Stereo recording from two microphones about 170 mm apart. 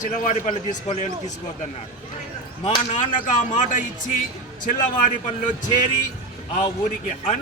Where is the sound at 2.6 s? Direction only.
40° left (ahead or behind).